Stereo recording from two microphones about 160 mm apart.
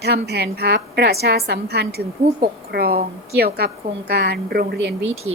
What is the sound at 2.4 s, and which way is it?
A woman's voice, 75° right (ahead or behind).